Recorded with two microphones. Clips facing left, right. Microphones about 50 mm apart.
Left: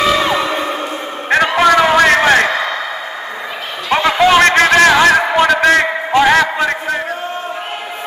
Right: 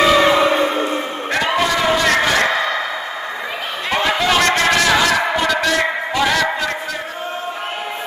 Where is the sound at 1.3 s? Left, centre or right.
Left.